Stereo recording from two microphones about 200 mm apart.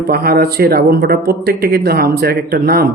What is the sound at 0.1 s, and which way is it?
Speech, 50° right (ahead or behind).